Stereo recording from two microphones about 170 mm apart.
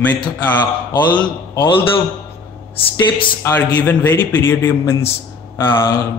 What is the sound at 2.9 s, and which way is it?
Speech, 20° left (ahead or behind).